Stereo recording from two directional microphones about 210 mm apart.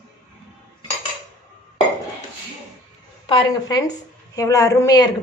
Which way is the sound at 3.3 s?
20° left (ahead or behind).